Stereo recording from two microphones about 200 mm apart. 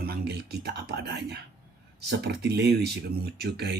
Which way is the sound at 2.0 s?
55° right (ahead or behind).